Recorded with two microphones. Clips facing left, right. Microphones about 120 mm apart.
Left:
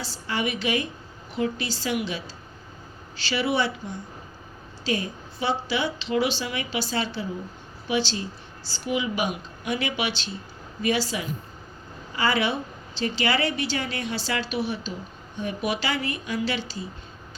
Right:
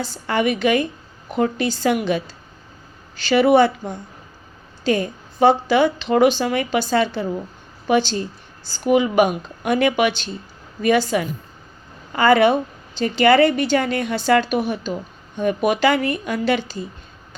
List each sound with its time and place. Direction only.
0.0 s a woman's voice: 55° right (ahead or behind)